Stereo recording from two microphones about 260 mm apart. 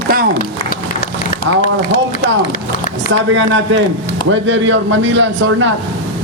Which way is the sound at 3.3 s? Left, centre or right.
Right.